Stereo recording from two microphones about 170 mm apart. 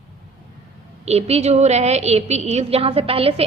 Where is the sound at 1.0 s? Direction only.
35° right (ahead or behind).